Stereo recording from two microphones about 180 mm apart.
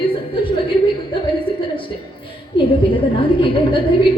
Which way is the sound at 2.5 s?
30° left (ahead or behind).